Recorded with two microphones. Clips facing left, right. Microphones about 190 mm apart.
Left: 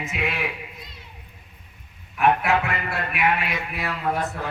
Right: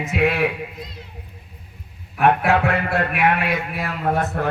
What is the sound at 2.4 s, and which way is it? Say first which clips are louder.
Speech: right 5 dB; 50° right (ahead or behind).